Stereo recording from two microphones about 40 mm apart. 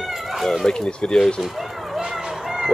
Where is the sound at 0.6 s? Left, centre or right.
Centre.